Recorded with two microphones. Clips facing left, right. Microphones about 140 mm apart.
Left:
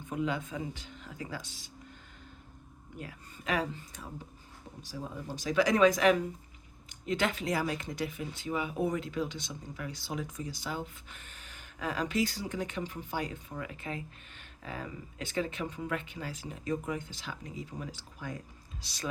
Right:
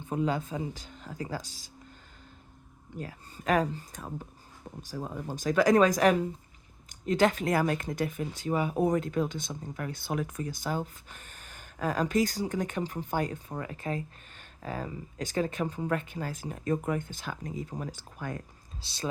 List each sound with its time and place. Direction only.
0.1 s speech: 35° right (ahead or behind)
3.0 s speech: 40° right (ahead or behind)
18.8 s speech: 30° right (ahead or behind)